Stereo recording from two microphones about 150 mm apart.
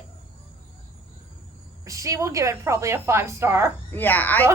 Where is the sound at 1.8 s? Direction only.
20° right (ahead or behind).